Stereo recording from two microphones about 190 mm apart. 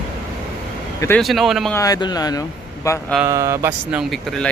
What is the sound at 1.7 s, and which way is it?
Speech, 20° left (ahead or behind).